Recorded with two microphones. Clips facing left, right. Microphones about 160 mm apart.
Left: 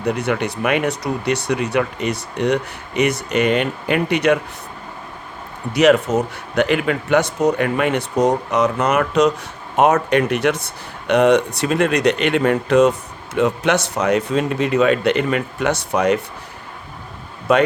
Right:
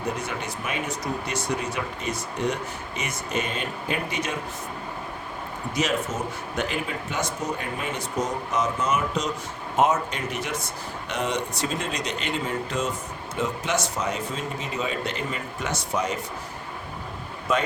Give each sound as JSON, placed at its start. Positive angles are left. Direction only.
{"t": 0.0, "sound": "speech", "side_deg": 70}
{"t": 5.7, "sound": "speech", "side_deg": 70}
{"t": 17.5, "sound": "speech", "side_deg": 65}